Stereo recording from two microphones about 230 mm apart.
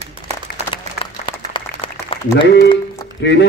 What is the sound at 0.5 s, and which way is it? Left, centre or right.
Applause, left.